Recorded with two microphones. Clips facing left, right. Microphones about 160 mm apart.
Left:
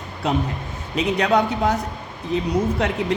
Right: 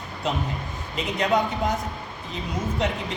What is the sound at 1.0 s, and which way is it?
Speech, 75° left (ahead or behind).